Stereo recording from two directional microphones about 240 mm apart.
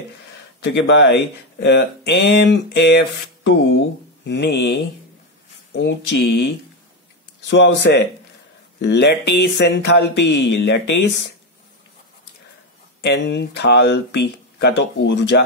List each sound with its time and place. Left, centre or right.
0.7 s speech: left
13.0 s speech: left